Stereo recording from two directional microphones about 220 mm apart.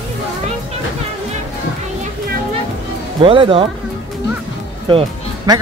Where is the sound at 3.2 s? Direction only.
25° right (ahead or behind).